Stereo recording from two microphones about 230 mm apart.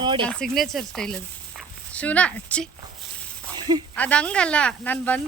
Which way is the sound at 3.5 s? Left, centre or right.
Centre.